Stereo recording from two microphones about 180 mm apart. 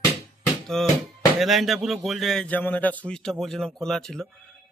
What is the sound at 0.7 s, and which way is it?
Speech, centre (ahead or behind).